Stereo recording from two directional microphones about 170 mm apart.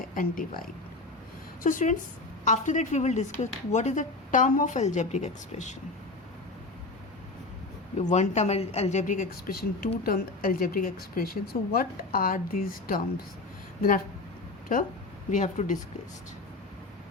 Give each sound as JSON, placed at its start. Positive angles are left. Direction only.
{"t": 0.2, "sound": "a woman's voice", "side_deg": 55}
{"t": 1.6, "sound": "a woman's voice", "side_deg": 50}
{"t": 7.9, "sound": "a woman's voice", "side_deg": 45}
{"t": 15.3, "sound": "a woman's voice", "side_deg": 45}